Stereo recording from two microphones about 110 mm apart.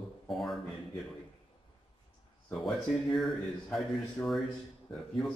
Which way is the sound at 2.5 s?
5° left (ahead or behind).